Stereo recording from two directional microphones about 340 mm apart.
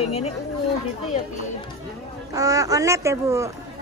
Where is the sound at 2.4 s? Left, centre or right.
Centre.